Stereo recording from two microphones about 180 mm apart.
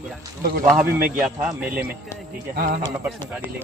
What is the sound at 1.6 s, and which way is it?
Speech, 10° right (ahead or behind).